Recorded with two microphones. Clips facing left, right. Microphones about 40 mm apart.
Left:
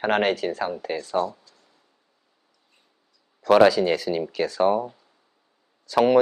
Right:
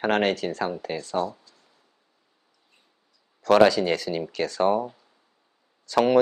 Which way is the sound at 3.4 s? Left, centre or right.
Centre.